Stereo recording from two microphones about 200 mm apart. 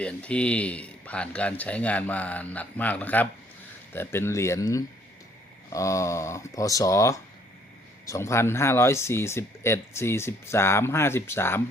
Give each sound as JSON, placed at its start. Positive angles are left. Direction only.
{"t": 0.0, "sound": "speech", "side_deg": 5}